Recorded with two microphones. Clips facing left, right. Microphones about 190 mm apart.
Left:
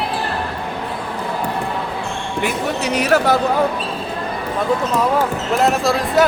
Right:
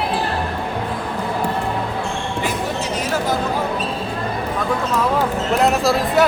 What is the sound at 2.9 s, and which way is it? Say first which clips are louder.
Speech: left 7 dB; 70° left (ahead or behind).